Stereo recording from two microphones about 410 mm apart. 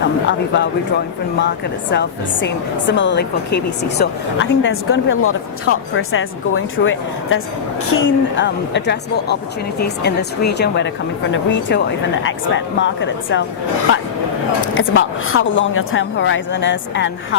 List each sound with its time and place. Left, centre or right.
0.3 s a woman's voice: left
1.9 s a woman's voice: left
14.8 s a woman's voice: left